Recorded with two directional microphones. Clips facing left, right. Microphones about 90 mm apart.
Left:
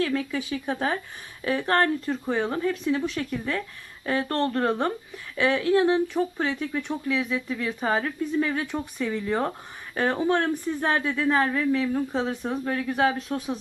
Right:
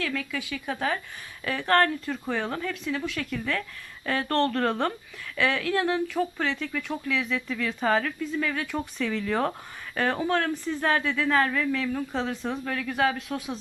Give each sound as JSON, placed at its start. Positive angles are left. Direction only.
{"t": 0.0, "sound": "speech", "side_deg": 30}